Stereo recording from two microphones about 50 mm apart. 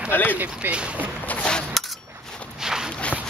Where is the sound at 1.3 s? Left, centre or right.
Left.